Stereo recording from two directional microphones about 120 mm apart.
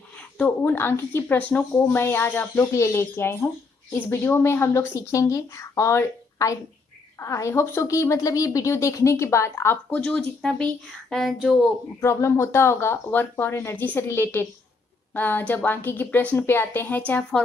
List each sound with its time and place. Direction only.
0.2 s a woman's voice: 15° left (ahead or behind)
10.0 s speech: 5° left (ahead or behind)
12.0 s a woman's voice: 25° left (ahead or behind)